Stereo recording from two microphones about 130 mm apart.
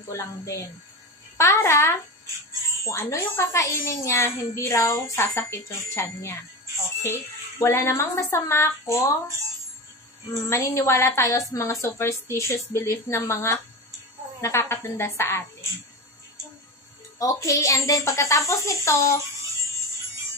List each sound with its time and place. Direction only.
0.1 s a woman's voice: 25° left (ahead or behind)
10.3 s a woman's voice: 25° left (ahead or behind)
17.2 s a woman's voice: 25° left (ahead or behind)